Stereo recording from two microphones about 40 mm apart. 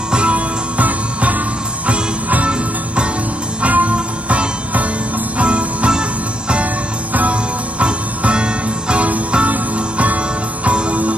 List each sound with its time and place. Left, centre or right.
0.1 s music: right
3.6 s music: right
7.8 s music: right